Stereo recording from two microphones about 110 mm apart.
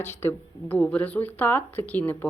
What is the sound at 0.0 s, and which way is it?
Speech, 20° left (ahead or behind).